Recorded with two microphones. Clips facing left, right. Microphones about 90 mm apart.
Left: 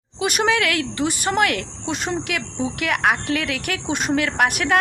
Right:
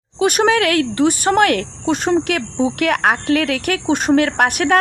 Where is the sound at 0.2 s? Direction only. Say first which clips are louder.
Right 5 dB; 40° right (ahead or behind).